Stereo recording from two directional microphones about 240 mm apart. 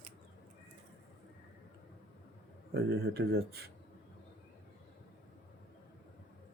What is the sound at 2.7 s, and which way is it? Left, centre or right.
Speech, right.